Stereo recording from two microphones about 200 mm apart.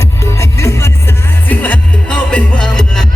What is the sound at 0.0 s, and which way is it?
Music, 15° left (ahead or behind).